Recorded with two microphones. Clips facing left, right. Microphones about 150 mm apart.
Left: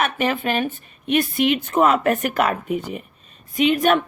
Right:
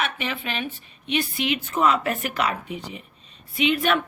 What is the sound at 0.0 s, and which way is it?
A woman's voice, 45° left (ahead or behind).